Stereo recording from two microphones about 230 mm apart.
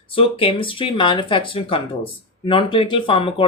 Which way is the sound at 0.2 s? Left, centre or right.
Left.